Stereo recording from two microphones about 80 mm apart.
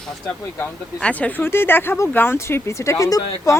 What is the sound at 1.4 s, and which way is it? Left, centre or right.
Speech, left.